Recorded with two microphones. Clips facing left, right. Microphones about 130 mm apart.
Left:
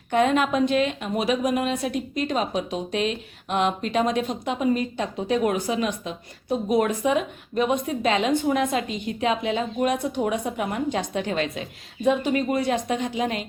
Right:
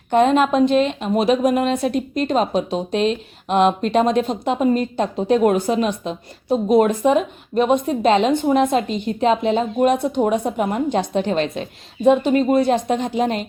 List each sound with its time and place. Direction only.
0.1 s a woman's voice: 30° right (ahead or behind)